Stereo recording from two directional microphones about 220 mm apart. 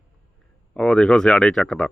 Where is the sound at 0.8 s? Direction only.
5° left (ahead or behind).